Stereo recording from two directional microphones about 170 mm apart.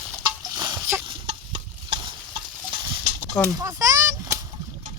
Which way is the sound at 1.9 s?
25° right (ahead or behind).